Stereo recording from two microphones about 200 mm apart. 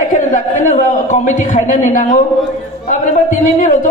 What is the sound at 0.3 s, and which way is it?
A man's voice, 35° left (ahead or behind).